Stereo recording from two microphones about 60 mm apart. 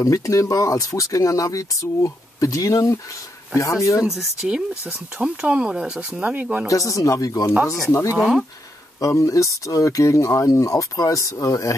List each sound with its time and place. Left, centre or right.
0.0 s speech: left
4.0 s speech: centre
6.7 s speech: left
7.9 s speech: left